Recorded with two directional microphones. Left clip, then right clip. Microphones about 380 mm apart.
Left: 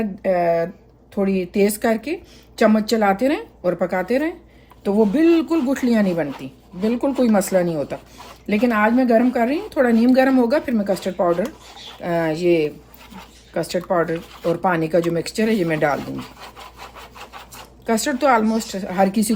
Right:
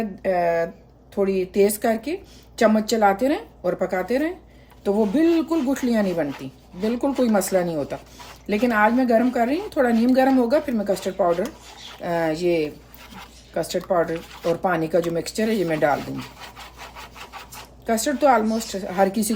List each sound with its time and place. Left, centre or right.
0.2 s a sound: centre
1.1 s a woman's voice: centre
16.0 s rub: centre
17.8 s a woman's voice: left